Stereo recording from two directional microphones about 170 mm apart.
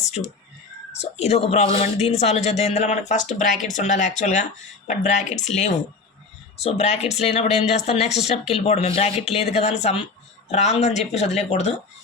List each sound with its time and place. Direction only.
0.2 s speech: 45° left (ahead or behind)